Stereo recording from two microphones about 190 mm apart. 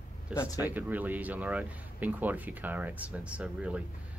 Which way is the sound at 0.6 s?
10° right (ahead or behind).